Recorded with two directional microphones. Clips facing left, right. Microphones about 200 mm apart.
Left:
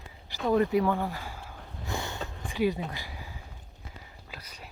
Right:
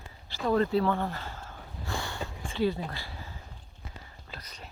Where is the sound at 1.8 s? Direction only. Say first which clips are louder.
Left 1 dB; 20° left (ahead or behind).